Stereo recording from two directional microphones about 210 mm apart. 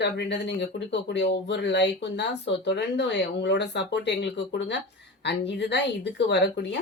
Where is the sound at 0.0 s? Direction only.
55° left (ahead or behind).